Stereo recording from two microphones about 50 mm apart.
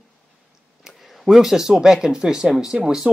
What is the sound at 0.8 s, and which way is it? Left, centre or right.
Speech, centre.